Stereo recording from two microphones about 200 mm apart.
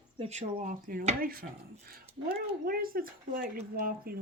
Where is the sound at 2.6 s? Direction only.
45° right (ahead or behind).